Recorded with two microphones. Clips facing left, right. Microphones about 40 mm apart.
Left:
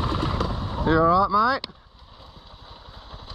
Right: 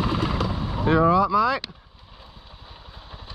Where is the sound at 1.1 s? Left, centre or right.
Right.